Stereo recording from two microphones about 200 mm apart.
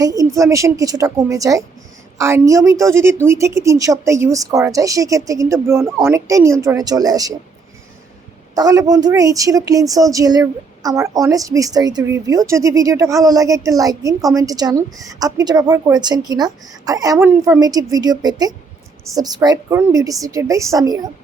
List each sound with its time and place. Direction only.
0.0 s a woman's voice: 15° right (ahead or behind)
8.5 s a woman's voice: 20° right (ahead or behind)